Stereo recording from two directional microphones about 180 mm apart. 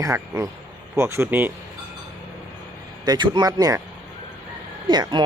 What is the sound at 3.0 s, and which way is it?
Speech, 25° right (ahead or behind).